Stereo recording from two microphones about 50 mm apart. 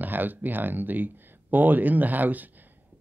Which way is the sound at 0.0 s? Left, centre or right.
Right.